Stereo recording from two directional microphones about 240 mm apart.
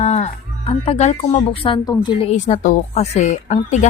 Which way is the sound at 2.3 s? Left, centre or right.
Left.